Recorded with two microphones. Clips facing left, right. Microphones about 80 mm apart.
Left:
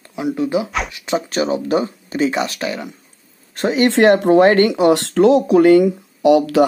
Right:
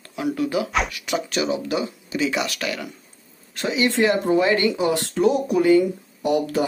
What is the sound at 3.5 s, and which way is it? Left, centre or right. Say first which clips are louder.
Speech: left 6 dB; left.